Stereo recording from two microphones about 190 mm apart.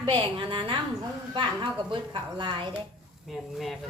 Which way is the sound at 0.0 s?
25° right (ahead or behind).